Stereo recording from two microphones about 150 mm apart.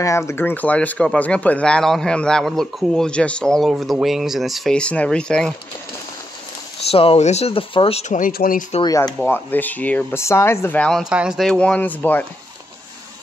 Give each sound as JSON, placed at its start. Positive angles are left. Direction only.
{"t": 0.0, "sound": "speech", "side_deg": 20}
{"t": 6.9, "sound": "speech", "side_deg": 40}
{"t": 8.8, "sound": "speech", "side_deg": 25}
{"t": 9.2, "sound": "speech", "side_deg": 10}